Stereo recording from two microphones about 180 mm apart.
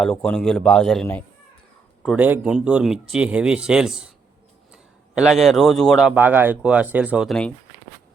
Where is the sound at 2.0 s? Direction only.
10° right (ahead or behind).